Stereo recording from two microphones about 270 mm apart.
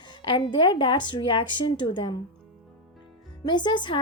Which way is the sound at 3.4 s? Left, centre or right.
Centre.